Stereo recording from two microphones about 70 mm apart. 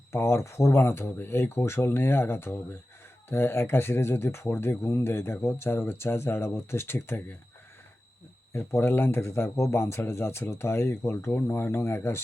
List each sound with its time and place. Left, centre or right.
0.1 s speech: left
8.5 s speech: left